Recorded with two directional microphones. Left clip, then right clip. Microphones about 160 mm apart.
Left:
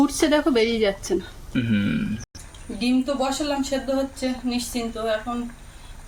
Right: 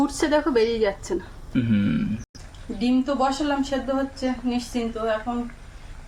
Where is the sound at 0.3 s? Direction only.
40° left (ahead or behind).